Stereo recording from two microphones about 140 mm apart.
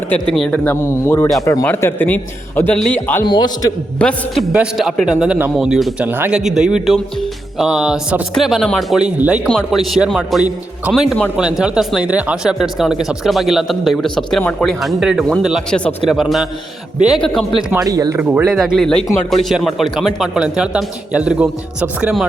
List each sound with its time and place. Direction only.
0.3 s a man's voice: 5° left (ahead or behind)
3.2 s a man's voice: 30° left (ahead or behind)
3.9 s a man's voice: 5° left (ahead or behind)
4.5 s speech: 5° right (ahead or behind)
6.4 s speech: 5° right (ahead or behind)
17.7 s speech: 25° right (ahead or behind)
18.2 s speech: 10° right (ahead or behind)